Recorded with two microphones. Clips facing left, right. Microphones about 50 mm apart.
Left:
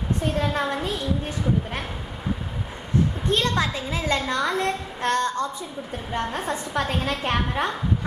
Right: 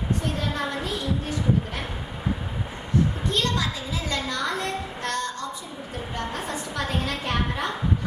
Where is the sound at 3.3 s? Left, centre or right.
Left.